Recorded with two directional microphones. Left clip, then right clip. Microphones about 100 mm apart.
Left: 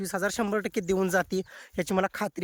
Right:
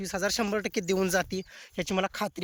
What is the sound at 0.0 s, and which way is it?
Speech, 40° left (ahead or behind).